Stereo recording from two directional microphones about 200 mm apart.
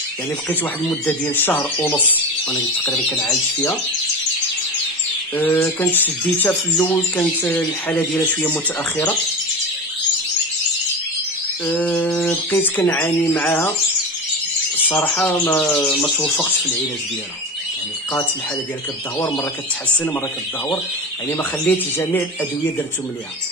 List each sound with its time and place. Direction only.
0.5 s speech: 10° left (ahead or behind)
5.3 s speech: 10° left (ahead or behind)
11.6 s speech: 10° left (ahead or behind)
14.8 s speech: 10° left (ahead or behind)
19.1 s speech: 20° left (ahead or behind)
21.3 s speech: 10° left (ahead or behind)